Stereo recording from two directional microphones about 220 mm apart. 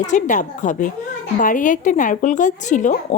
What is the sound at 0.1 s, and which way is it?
A woman's voice, 35° left (ahead or behind).